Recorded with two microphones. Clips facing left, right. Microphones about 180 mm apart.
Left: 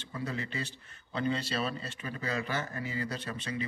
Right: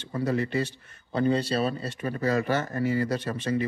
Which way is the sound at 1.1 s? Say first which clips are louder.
Right 8 dB; 40° right (ahead or behind).